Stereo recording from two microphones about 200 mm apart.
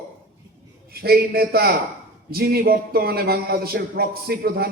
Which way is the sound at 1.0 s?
50° right (ahead or behind).